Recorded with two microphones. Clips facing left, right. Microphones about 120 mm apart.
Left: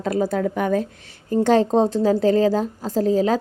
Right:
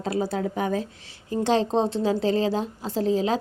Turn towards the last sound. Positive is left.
turn(degrees=45)  # may be behind; listen again after turning